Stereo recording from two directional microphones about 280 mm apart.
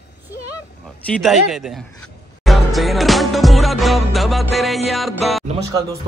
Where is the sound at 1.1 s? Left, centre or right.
Centre.